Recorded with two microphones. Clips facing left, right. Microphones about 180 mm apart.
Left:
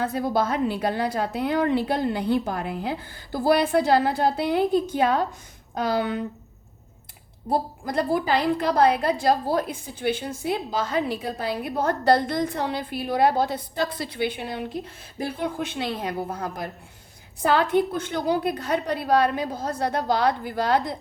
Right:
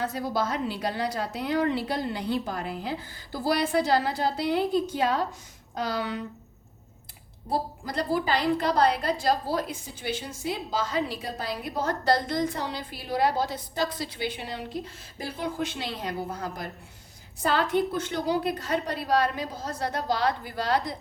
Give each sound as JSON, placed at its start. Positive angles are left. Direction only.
{"t": 0.0, "sound": "a woman's voice", "side_deg": 55}
{"t": 7.9, "sound": "a woman's voice", "side_deg": 55}